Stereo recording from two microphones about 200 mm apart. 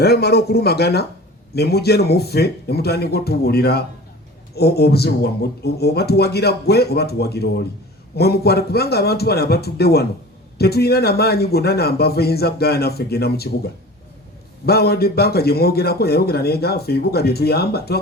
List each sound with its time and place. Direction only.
0.0 s a man's voice: 55° left (ahead or behind)
14.7 s a man's voice: 50° left (ahead or behind)